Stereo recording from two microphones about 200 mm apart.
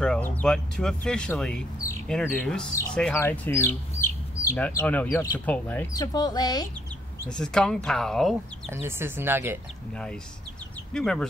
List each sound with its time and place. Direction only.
0.0 s speech: 5° left (ahead or behind)
5.9 s speech: 20° left (ahead or behind)
7.2 s speech: 5° left (ahead or behind)
8.8 s speech: 10° right (ahead or behind)
10.9 s speech: 5° left (ahead or behind)